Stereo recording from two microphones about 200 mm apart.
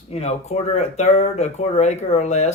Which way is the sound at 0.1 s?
30° left (ahead or behind).